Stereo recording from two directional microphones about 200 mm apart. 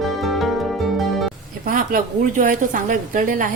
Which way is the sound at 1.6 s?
40° right (ahead or behind).